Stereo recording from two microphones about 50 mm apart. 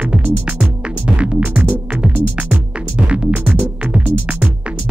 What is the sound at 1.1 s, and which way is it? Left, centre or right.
Music, right.